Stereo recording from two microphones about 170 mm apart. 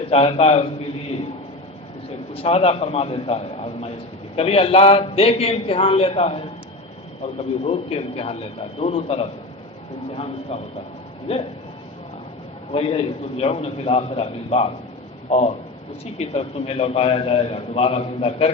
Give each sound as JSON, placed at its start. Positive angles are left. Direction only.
{"t": 0.1, "sound": "a man's voice", "side_deg": 35}
{"t": 2.3, "sound": "a man's voice", "side_deg": 35}
{"t": 7.6, "sound": "a man's voice", "side_deg": 35}
{"t": 10.5, "sound": "a man's voice", "side_deg": 35}
{"t": 12.7, "sound": "a man's voice", "side_deg": 35}